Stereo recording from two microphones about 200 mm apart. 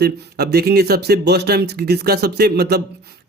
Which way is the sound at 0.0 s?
55° right (ahead or behind).